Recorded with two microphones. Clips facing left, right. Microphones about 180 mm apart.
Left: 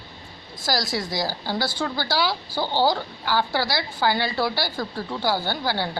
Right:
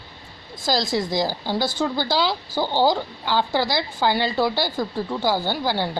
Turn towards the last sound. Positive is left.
turn(degrees=-15)  # may be behind; listen again after turning